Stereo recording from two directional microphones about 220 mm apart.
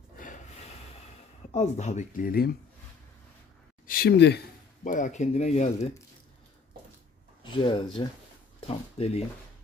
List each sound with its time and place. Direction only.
0.2 s train: 30° left (ahead or behind)
1.5 s speech: 30° left (ahead or behind)
3.8 s speech: 40° left (ahead or behind)
4.8 s speech: 35° left (ahead or behind)
7.6 s speech: 20° left (ahead or behind)